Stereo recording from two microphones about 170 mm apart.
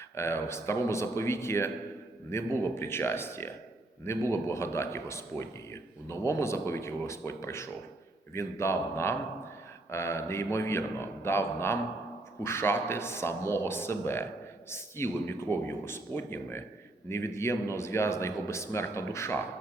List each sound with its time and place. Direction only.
0.2 s speech: 15° left (ahead or behind)